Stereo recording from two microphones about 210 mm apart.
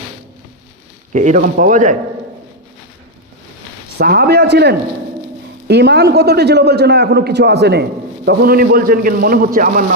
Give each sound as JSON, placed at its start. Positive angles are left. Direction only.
{"t": 1.1, "sound": "speech", "side_deg": -35}
{"t": 3.9, "sound": "a man's voice", "side_deg": -45}